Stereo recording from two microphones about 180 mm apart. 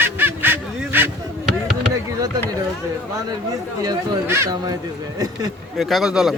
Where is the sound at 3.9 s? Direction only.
20° right (ahead or behind).